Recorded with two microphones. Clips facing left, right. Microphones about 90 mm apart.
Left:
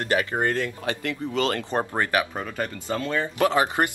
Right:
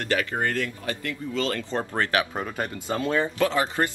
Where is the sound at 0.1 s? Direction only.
20° left (ahead or behind).